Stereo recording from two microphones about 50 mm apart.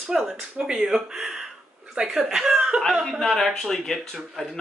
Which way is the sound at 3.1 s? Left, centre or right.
Centre.